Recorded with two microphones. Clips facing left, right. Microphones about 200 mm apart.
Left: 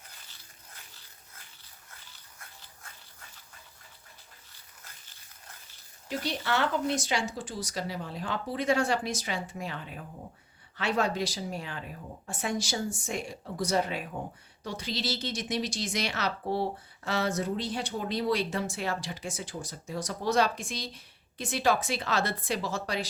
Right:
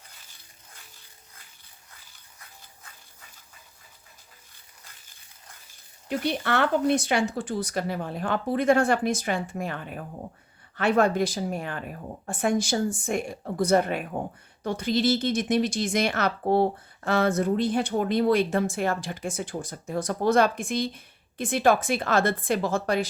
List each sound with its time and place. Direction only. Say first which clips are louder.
6.1 s speech: right 5 dB; 55° right (ahead or behind)